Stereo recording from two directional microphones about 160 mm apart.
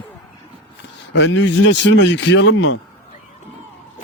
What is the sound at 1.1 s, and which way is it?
Speech, 90° left.